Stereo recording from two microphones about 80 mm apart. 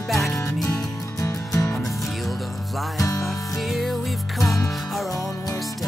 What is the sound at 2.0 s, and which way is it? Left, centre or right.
Music, centre.